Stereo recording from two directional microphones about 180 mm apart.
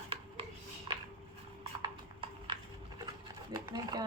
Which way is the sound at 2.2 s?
30° right (ahead or behind).